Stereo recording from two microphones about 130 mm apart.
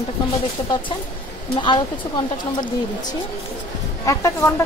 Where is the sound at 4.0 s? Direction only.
25° left (ahead or behind).